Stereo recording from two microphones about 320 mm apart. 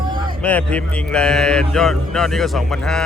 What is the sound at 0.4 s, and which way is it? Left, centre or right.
Speech, centre.